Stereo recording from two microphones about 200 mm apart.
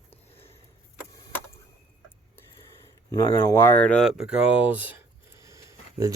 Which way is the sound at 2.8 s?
10° left (ahead or behind).